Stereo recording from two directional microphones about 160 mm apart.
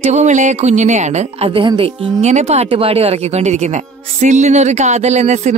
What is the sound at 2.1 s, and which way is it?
A woman's voice, 45° right (ahead or behind).